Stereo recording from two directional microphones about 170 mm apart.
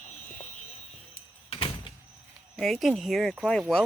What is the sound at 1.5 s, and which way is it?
Door, 30° left (ahead or behind).